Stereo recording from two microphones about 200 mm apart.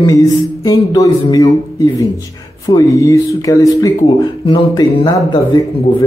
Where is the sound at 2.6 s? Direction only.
15° left (ahead or behind).